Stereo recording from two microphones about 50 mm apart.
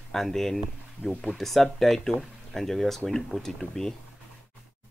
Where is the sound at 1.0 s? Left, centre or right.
Right.